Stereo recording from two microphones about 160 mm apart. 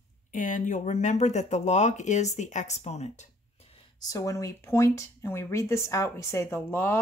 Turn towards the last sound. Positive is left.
turn(degrees=15)  # may be behind; listen again after turning